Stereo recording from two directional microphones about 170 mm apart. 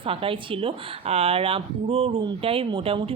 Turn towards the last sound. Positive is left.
turn(degrees=-35)  # may be behind; listen again after turning